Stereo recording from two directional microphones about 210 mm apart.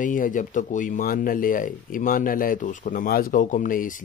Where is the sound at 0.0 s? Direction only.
40° left (ahead or behind).